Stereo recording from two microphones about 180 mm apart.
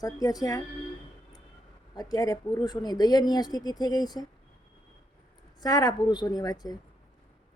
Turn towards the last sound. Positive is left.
turn(degrees=20)  # may be behind; listen again after turning